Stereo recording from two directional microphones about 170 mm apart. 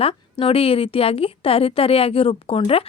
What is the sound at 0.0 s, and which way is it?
A woman's voice, 35° left (ahead or behind).